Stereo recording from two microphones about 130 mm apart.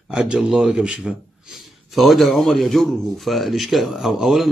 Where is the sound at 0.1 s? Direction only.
5° right (ahead or behind).